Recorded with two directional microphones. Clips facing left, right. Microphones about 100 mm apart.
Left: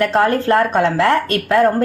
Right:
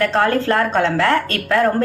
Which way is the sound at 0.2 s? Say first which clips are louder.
Left 3 dB; 25° left (ahead or behind).